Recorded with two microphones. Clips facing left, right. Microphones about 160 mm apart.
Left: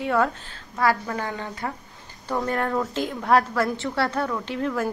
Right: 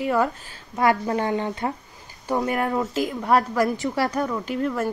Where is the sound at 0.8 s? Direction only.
20° right (ahead or behind); by 3.4 s 5° right (ahead or behind).